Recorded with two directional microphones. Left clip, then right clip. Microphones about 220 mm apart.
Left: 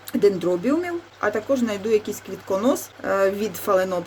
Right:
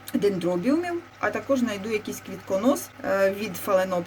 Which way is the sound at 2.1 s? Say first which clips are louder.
Left 3 dB; 15° left (ahead or behind).